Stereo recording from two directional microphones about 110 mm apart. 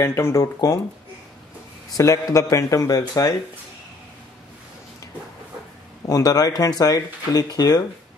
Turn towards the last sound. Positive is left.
turn(degrees=35)  # may be behind; listen again after turning